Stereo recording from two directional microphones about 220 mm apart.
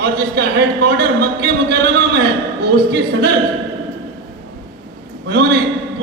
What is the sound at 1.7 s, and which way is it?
A man's voice, 45° right (ahead or behind).